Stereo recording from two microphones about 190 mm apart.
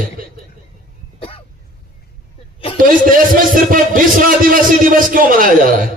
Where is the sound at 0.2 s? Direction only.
50° right (ahead or behind).